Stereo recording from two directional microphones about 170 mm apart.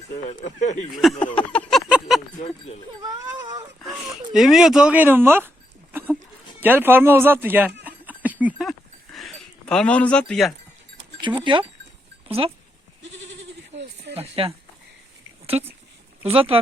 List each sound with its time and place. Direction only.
0.3 s speech: 45° left (ahead or behind)
1.4 s a sound: 5° left (ahead or behind)
3.0 s speech: 25° right (ahead or behind)
3.8 s speech: centre (ahead or behind)
6.6 s speech: 10° right (ahead or behind)
7.9 s a sound: 10° right (ahead or behind)
11.2 s speech: 30° right (ahead or behind)
13.0 s goat: 90° right
14.2 s speech: 35° right (ahead or behind)